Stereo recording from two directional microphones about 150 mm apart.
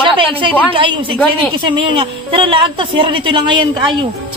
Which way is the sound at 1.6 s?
35° right (ahead or behind).